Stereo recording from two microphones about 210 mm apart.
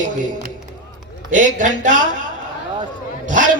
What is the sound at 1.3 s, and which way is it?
Speech, 35° right (ahead or behind).